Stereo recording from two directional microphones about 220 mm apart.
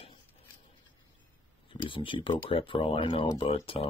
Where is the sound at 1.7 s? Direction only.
25° left (ahead or behind).